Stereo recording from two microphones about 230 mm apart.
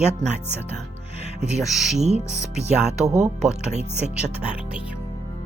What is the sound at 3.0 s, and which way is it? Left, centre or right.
Speech, right.